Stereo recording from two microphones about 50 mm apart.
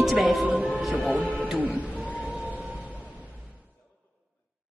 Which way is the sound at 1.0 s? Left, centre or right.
Right.